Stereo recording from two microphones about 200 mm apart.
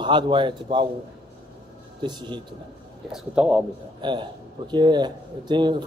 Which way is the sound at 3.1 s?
5° right (ahead or behind).